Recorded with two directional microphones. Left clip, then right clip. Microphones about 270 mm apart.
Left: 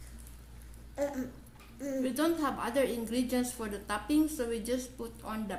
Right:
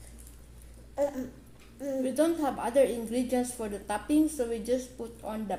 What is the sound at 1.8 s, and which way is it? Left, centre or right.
A woman's voice, centre.